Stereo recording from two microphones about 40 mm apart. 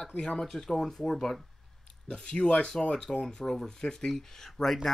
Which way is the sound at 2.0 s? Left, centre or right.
Left.